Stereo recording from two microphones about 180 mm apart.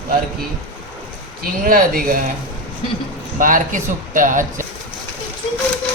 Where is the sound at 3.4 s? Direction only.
50° right (ahead or behind).